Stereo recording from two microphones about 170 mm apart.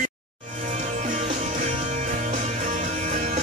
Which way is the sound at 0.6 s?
45° right (ahead or behind).